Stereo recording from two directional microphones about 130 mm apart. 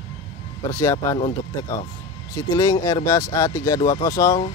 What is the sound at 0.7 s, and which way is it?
Speech, 25° left (ahead or behind).